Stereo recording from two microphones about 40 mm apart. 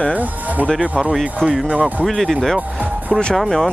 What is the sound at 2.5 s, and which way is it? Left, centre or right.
Speech, right.